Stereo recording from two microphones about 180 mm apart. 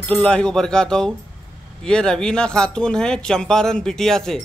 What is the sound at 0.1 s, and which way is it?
Speech, 5° left (ahead or behind).